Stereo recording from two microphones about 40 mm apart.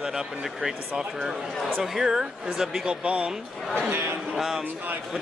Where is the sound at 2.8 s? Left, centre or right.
Right.